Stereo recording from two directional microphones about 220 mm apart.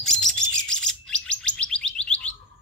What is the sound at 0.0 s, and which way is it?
Chirp, centre (ahead or behind).